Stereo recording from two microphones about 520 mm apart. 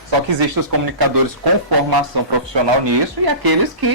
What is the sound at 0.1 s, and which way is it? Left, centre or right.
Speech, right.